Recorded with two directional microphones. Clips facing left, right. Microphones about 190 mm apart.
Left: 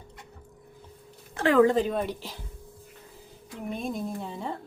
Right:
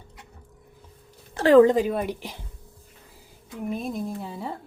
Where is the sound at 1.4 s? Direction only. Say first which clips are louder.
Right 6 dB; 35° right (ahead or behind).